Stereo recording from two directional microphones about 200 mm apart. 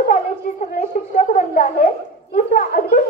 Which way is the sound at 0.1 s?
40° left (ahead or behind).